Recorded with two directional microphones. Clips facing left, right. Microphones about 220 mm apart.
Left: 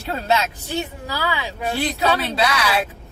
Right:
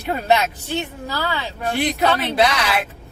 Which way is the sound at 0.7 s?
10° left (ahead or behind).